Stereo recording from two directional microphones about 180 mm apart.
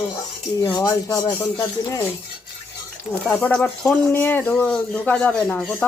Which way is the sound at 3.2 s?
5° left (ahead or behind).